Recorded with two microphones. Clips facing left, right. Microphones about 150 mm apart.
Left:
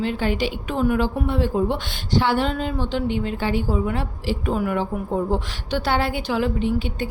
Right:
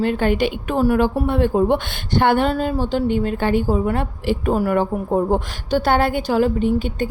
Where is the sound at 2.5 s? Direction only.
40° right (ahead or behind).